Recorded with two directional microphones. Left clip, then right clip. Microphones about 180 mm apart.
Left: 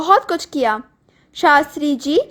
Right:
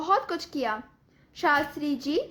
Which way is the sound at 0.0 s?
40° left (ahead or behind).